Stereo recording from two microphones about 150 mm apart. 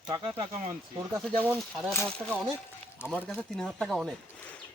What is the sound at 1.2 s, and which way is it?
Speech, 10° left (ahead or behind).